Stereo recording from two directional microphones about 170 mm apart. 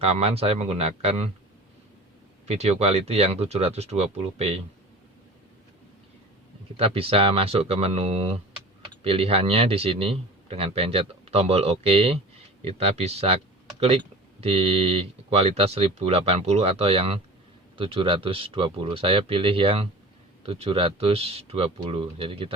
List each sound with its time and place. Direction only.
0.0 s speech: 35° right (ahead or behind)
2.5 s speech: 40° right (ahead or behind)
6.7 s speech: 35° right (ahead or behind)